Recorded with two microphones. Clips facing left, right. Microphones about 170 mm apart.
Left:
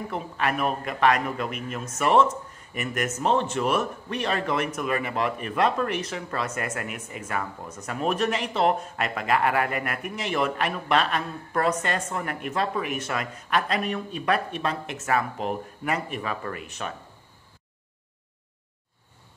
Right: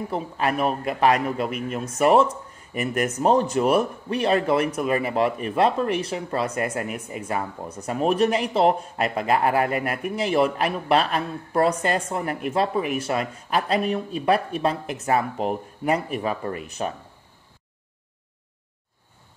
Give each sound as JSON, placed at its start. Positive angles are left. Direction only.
{"t": 0.1, "sound": "speech", "side_deg": -35}